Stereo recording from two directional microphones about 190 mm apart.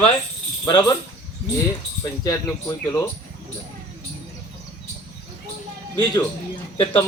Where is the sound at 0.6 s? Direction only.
20° left (ahead or behind).